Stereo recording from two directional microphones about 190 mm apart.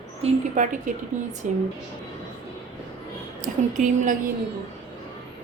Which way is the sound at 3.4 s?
40° right (ahead or behind).